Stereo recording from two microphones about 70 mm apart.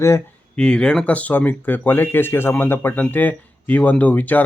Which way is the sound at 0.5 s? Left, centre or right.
Centre.